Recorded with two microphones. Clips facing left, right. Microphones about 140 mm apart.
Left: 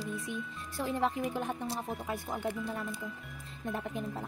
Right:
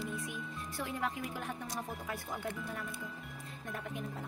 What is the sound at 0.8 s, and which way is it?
Speech, 30° left (ahead or behind).